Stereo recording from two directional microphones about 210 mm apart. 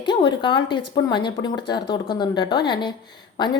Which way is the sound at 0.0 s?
20° left (ahead or behind).